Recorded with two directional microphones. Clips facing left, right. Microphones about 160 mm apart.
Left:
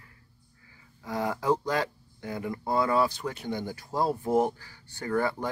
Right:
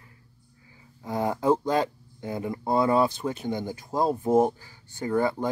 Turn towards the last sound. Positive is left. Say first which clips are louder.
# right 3 dB
turn(degrees=-20)  # may be behind; listen again after turning